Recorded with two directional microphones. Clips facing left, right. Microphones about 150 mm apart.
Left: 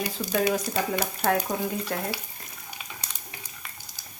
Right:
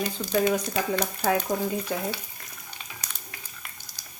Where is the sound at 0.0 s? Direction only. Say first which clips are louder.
Right 1 dB; 10° left (ahead or behind).